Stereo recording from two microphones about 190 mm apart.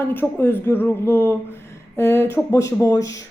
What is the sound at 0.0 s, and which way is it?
A woman's voice, 10° left (ahead or behind).